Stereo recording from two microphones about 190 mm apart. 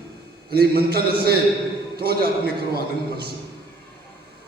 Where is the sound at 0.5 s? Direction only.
55° right (ahead or behind).